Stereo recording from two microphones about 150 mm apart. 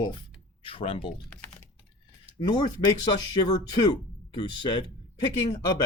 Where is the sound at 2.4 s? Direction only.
30° left (ahead or behind).